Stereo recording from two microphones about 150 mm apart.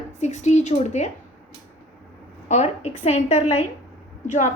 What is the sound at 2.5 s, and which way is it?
A woman's voice, 50° left (ahead or behind).